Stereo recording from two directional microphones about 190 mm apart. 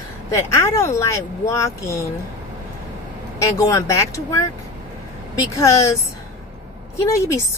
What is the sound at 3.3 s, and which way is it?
A woman's voice, 15° left (ahead or behind).